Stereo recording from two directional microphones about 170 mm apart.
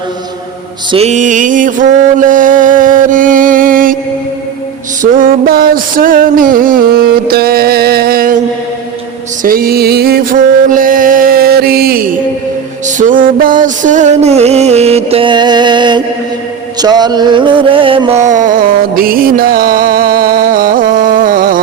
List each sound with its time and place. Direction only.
0.9 s mantra: 35° right (ahead or behind); by 3.9 s 55° right (ahead or behind)
5.1 s a sound: 55° right (ahead or behind)
9.4 s music: 60° right (ahead or behind); by 18.2 s 30° right (ahead or behind)
18.2 s music: 45° right (ahead or behind)